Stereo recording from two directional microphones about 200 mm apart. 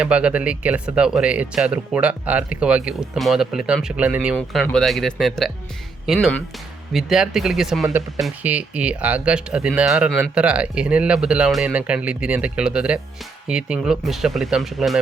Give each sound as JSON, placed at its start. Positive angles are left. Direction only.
{"t": 0.0, "sound": "speech", "side_deg": -5}
{"t": 4.4, "sound": "speech", "side_deg": 5}